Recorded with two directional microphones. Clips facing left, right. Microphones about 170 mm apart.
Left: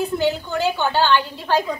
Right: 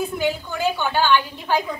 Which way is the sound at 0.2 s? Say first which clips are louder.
Even; 10° right (ahead or behind).